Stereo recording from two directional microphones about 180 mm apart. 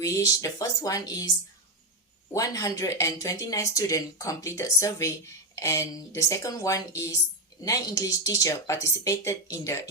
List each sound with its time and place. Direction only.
0.0 s speech: 20° left (ahead or behind)
2.3 s speech: 20° left (ahead or behind)